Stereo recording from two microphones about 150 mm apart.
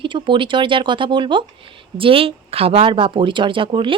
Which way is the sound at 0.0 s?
35° right (ahead or behind).